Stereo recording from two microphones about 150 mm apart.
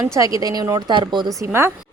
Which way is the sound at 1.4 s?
15° right (ahead or behind).